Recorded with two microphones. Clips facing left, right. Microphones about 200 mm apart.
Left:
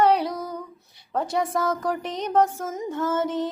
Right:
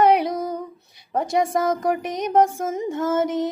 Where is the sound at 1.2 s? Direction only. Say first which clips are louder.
Right 4 dB; 15° right (ahead or behind).